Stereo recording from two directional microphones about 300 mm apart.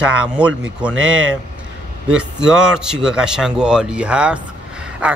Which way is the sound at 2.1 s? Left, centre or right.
Centre.